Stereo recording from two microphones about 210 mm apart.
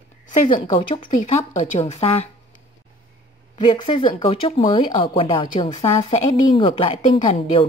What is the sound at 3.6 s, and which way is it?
A woman's voice, 25° left (ahead or behind).